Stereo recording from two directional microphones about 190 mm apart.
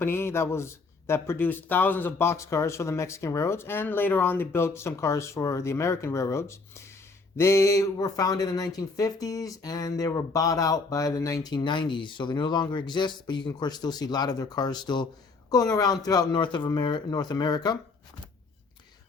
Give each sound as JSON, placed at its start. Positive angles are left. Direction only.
{"t": 0.0, "sound": "speech", "side_deg": 10}